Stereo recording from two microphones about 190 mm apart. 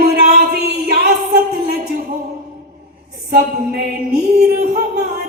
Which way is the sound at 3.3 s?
55° right (ahead or behind).